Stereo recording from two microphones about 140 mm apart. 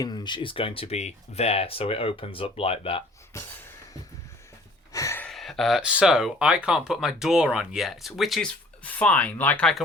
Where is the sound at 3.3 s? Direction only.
15° left (ahead or behind).